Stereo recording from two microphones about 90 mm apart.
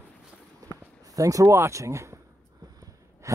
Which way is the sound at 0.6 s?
40° right (ahead or behind).